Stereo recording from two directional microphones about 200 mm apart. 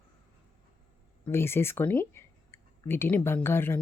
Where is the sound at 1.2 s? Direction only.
10° left (ahead or behind).